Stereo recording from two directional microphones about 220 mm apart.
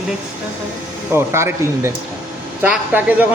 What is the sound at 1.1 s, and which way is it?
A man's voice, 10° right (ahead or behind).